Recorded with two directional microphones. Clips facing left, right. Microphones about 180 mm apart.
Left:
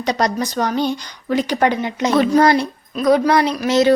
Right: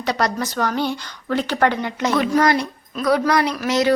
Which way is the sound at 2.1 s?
30° left (ahead or behind).